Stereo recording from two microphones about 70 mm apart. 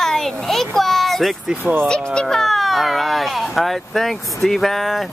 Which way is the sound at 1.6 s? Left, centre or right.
Right.